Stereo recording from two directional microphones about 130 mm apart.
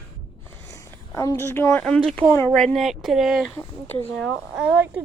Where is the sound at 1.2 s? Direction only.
20° left (ahead or behind).